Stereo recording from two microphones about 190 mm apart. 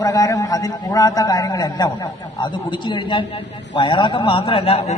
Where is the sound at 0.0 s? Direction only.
20° left (ahead or behind).